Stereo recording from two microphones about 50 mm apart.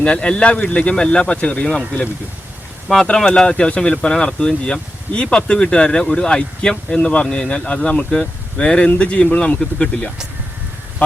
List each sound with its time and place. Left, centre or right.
0.0 s speech: left
3.2 s speech: centre